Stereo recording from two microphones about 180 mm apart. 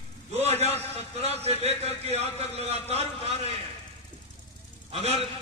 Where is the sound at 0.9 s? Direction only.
35° right (ahead or behind).